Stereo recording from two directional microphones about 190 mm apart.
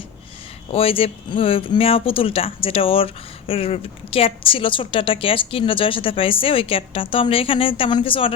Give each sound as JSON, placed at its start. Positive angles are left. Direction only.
{"t": 0.7, "sound": "speech", "side_deg": 30}